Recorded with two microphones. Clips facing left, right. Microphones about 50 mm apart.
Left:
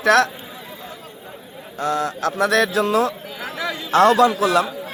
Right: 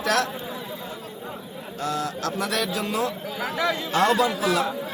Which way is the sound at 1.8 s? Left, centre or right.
Left.